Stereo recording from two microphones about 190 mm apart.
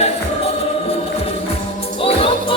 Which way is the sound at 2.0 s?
30° left (ahead or behind).